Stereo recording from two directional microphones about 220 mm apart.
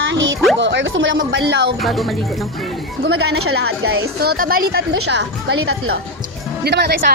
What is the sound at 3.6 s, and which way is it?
A woman's voice, 55° right (ahead or behind).